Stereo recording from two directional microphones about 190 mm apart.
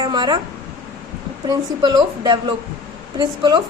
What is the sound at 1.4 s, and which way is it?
A woman's voice, 20° right (ahead or behind).